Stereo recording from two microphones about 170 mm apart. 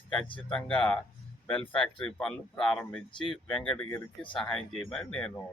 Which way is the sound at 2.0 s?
5° left (ahead or behind).